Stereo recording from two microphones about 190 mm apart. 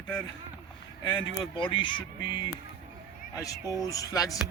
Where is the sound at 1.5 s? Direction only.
25° left (ahead or behind).